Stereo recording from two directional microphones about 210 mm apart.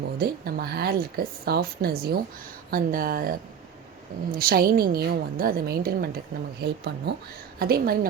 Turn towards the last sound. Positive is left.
turn(degrees=-45)  # may be behind; listen again after turning